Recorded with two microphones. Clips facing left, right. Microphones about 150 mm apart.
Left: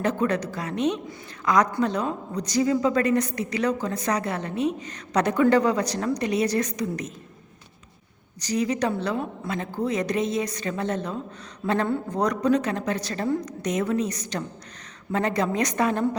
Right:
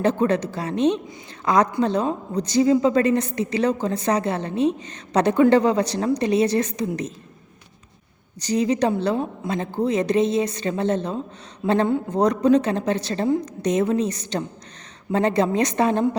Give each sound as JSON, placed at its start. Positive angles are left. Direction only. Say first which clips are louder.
{"t": 0.0, "sound": "a woman's voice", "louder": "right 4 dB", "side_deg": -30}
{"t": 8.4, "sound": "a woman's voice", "louder": "right 4 dB", "side_deg": -30}